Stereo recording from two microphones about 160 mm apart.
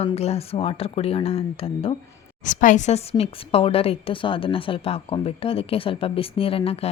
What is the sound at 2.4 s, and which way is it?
A woman's voice, 50° left (ahead or behind).